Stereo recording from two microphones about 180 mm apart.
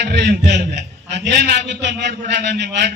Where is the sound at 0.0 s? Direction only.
65° right (ahead or behind).